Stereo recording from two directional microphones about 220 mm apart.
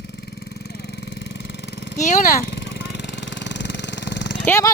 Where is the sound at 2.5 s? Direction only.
50° left (ahead or behind).